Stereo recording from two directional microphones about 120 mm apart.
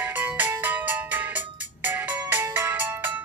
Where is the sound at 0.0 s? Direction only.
15° right (ahead or behind).